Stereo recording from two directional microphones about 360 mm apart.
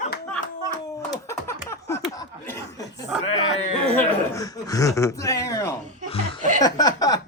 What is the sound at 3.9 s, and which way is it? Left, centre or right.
Speech, centre.